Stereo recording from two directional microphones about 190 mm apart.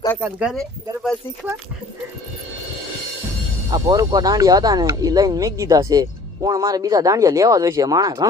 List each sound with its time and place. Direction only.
0.2 s speech: 10° right (ahead or behind)
3.7 s speech: 20° right (ahead or behind)